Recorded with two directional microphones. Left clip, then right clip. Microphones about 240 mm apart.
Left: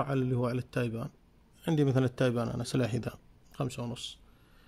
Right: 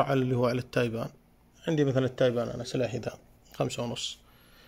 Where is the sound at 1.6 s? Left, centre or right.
Left.